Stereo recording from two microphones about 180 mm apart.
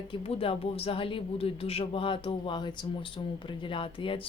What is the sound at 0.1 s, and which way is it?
A woman's voice, 30° left (ahead or behind).